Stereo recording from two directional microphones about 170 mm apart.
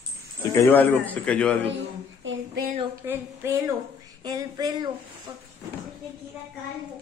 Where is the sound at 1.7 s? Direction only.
90° right.